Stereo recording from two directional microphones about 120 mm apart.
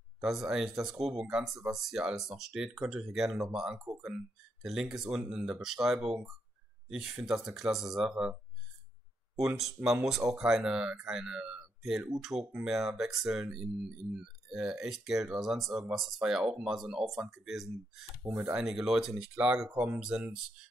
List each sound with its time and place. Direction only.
0.2 s speech: 5° right (ahead or behind)
9.4 s speech: 5° right (ahead or behind)
18.2 s speech: 25° right (ahead or behind)
18.5 s speech: 5° right (ahead or behind)